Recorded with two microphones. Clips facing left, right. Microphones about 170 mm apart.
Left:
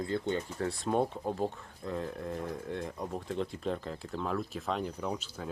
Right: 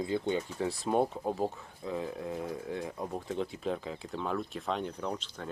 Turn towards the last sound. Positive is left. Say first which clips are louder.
# even
turn(degrees=5)  # may be behind; listen again after turning